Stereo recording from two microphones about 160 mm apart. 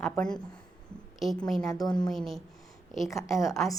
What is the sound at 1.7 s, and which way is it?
Speech, 25° left (ahead or behind).